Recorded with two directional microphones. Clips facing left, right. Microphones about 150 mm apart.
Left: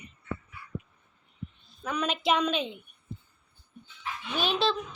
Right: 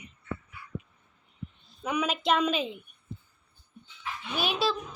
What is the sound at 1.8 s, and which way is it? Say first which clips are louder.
Speech: right 1 dB; 10° right (ahead or behind).